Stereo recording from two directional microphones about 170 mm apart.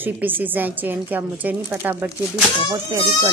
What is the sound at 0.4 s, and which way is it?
Speech, 10° right (ahead or behind).